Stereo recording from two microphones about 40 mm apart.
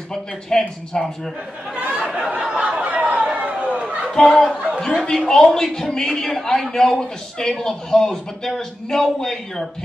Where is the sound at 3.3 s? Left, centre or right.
Right.